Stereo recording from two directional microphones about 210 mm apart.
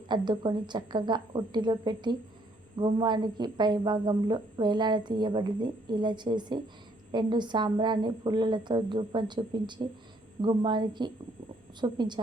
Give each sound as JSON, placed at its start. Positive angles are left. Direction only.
{"t": 0.1, "sound": "a woman's voice", "side_deg": -20}